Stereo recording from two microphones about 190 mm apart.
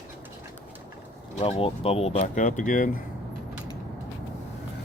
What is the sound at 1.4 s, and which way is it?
Speech, 30° left (ahead or behind).